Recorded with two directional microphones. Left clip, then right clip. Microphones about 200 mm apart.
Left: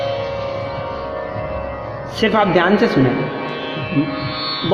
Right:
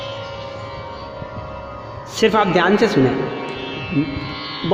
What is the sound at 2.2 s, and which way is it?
Speech, 50° right (ahead or behind).